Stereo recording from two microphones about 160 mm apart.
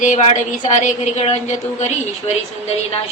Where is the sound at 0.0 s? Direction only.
50° left (ahead or behind).